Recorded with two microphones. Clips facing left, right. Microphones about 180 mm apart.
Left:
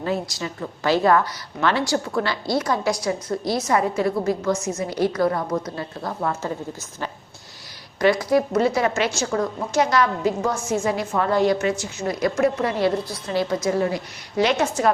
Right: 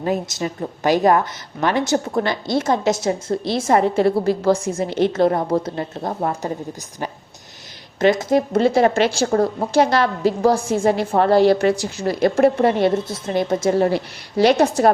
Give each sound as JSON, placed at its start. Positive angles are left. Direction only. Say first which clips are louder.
{"t": 0.0, "sound": "a woman's voice", "louder": "right 4 dB", "side_deg": -20}
{"t": 7.9, "sound": "a woman's voice", "louder": "right 2 dB", "side_deg": -20}